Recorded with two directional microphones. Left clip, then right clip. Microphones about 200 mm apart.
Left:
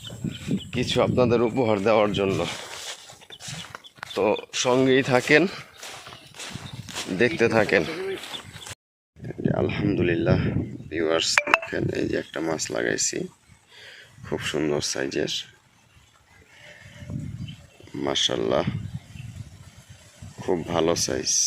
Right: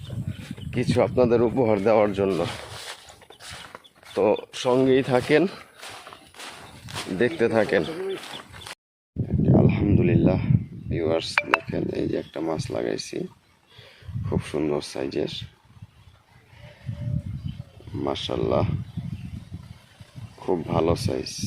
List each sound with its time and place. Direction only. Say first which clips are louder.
0.7 s speech: right 1 dB; centre (ahead or behind)
4.5 s a sound: even; 10° left (ahead or behind)
7.2 s speech: left 1 dB; 15° left (ahead or behind)
9.4 s a sound: right 3 dB; centre (ahead or behind)
10.9 s speech: left 2 dB; centre (ahead or behind)
14.3 s speech: left 1 dB; centre (ahead or behind)
18.0 s speech: left 3 dB; centre (ahead or behind)
20.4 s speech: even; centre (ahead or behind)